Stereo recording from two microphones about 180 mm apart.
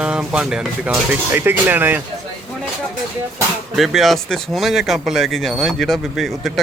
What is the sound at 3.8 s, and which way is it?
Speech, centre (ahead or behind).